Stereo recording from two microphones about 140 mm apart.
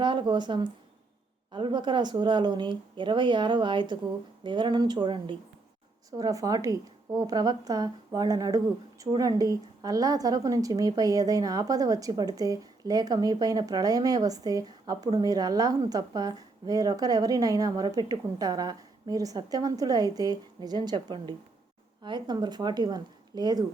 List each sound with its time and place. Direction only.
0.0 s speech: 35° right (ahead or behind)
6.1 s a woman's voice: 25° right (ahead or behind)